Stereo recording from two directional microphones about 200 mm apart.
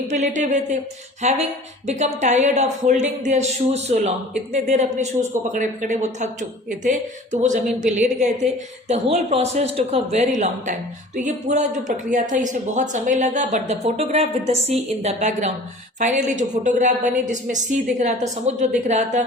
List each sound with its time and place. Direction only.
0.1 s a woman's voice: 35° right (ahead or behind)